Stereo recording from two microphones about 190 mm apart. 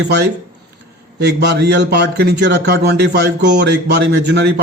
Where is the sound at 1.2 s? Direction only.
60° right (ahead or behind).